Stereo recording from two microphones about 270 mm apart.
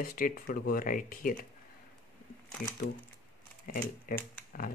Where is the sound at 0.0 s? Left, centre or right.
Left.